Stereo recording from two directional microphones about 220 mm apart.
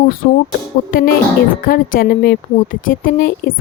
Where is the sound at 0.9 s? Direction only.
40° left (ahead or behind).